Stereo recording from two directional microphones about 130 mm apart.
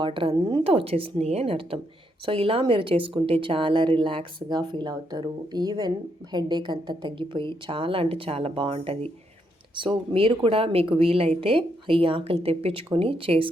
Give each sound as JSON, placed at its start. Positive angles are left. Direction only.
{"t": 0.0, "sound": "a woman's voice", "side_deg": -45}